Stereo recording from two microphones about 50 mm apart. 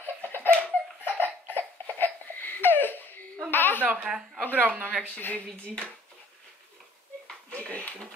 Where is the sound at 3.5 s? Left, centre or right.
Left.